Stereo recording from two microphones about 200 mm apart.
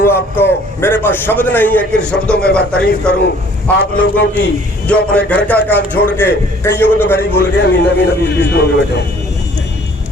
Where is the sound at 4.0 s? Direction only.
65° left (ahead or behind).